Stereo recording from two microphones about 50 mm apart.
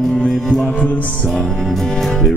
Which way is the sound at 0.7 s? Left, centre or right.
Left.